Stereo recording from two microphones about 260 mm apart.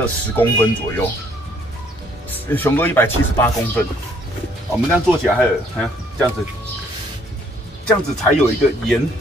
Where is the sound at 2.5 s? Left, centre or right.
Centre.